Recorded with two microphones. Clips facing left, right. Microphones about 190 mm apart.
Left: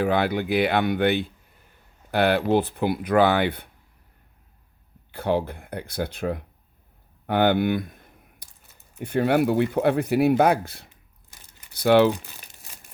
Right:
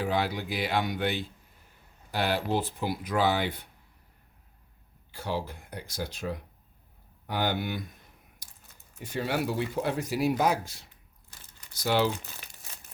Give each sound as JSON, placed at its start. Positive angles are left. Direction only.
{"t": 0.0, "sound": "speech", "side_deg": 60}
{"t": 5.1, "sound": "speech", "side_deg": 60}
{"t": 7.3, "sound": "a sound", "side_deg": 60}
{"t": 9.0, "sound": "speech", "side_deg": 60}
{"t": 11.3, "sound": "crumpling", "side_deg": 15}
{"t": 11.7, "sound": "speech", "side_deg": 60}